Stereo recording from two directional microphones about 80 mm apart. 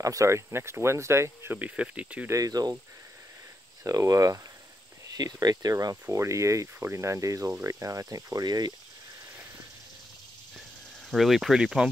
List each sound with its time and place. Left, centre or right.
0.0 s speech: right
1.6 s speech: centre
2.2 s speech: right
3.8 s speech: right
5.1 s speech: right
6.0 s speech: right
11.1 s speech: centre